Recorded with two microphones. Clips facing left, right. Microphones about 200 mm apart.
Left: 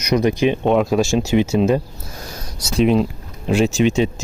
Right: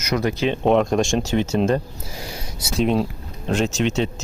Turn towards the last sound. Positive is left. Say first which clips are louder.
# left 5 dB
turn(degrees=10)  # may be behind; listen again after turning